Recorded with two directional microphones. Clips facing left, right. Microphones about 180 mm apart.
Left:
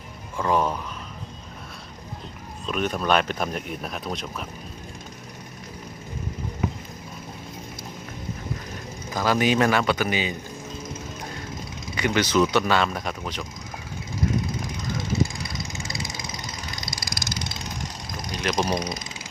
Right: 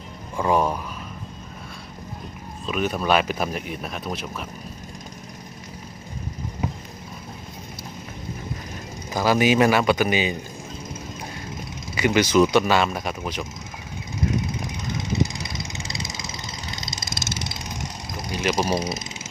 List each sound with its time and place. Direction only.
0.3 s a sound: 15° right (ahead or behind)
2.6 s speech: 5° right (ahead or behind)
9.1 s speech: 10° right (ahead or behind)
11.9 s speech: 10° right (ahead or behind)
15.2 s vehicle: 20° right (ahead or behind)
18.3 s vehicle: 5° right (ahead or behind)
18.7 s speech: 25° right (ahead or behind)